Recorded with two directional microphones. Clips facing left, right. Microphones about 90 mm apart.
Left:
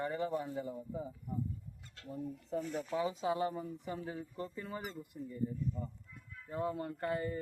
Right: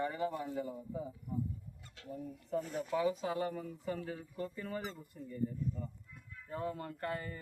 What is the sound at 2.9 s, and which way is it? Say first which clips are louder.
Speech: right 1 dB; 25° left (ahead or behind).